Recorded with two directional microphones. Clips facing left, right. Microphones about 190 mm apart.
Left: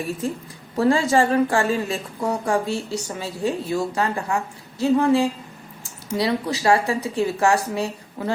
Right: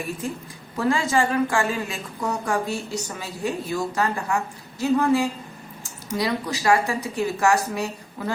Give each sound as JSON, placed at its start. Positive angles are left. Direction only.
{"t": 0.8, "sound": "a woman's voice", "side_deg": 35}